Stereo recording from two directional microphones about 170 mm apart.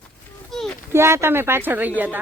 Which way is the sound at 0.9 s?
15° right (ahead or behind).